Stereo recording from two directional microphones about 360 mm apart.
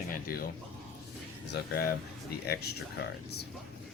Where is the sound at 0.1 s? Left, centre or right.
Left.